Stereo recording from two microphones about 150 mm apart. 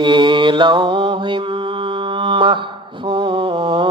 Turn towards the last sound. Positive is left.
turn(degrees=-35)  # may be behind; listen again after turning